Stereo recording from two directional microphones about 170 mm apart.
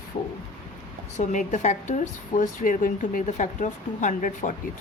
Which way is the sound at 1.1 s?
45° left (ahead or behind).